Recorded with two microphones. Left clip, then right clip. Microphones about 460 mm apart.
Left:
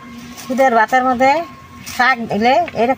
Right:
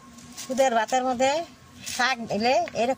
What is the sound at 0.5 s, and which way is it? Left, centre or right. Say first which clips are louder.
Speech: left 10 dB; right.